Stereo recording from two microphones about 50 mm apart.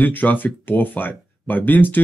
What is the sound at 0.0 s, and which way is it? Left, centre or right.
Speech, left.